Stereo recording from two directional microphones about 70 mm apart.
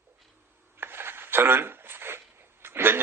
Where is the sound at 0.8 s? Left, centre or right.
Right.